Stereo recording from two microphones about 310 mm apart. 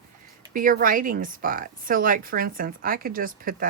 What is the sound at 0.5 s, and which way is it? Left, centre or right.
Speech, right.